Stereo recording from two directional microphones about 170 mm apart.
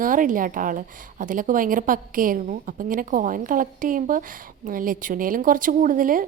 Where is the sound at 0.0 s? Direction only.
50° right (ahead or behind).